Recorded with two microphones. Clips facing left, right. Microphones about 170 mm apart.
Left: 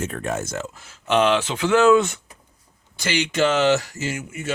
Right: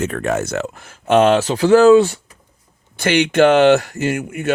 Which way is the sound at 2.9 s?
60° right (ahead or behind).